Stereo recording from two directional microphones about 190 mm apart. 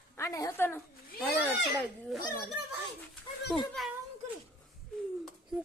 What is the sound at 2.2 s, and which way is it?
Speech, 15° left (ahead or behind).